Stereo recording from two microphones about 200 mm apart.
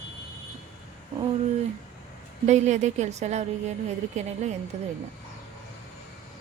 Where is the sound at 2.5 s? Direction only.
35° right (ahead or behind).